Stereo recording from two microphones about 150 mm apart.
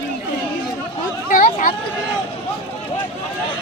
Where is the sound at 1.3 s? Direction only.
65° left (ahead or behind).